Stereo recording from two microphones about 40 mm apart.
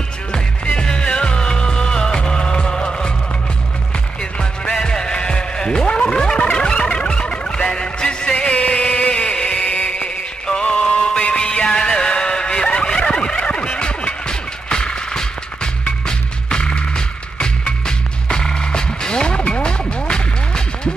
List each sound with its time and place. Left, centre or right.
0.3 s music: left
4.2 s music: left
8.5 s a sound: left
11.1 s music: left